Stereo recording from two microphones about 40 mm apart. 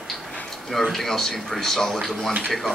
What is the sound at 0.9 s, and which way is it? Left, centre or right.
A man's voice, centre.